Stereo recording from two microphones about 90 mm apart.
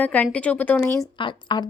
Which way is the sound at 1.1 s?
60° left (ahead or behind).